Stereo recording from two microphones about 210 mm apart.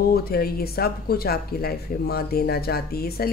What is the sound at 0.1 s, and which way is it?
Speech, 45° left (ahead or behind).